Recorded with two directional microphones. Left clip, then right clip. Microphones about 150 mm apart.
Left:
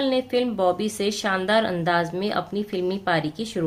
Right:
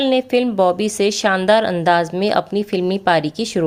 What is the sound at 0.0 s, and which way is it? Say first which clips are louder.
Speech: right 6 dB; 50° right (ahead or behind).